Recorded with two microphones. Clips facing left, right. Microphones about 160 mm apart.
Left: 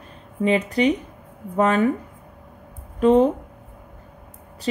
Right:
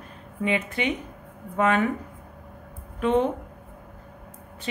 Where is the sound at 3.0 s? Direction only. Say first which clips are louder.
Left 7 dB; 35° left (ahead or behind).